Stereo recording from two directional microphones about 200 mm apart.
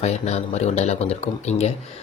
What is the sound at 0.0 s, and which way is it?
Speech, 35° left (ahead or behind).